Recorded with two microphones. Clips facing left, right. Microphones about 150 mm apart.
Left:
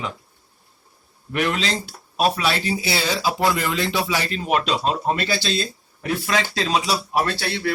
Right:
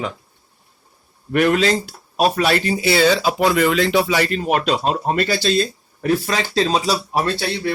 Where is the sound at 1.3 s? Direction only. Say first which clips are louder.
Right 7 dB; 50° right (ahead or behind).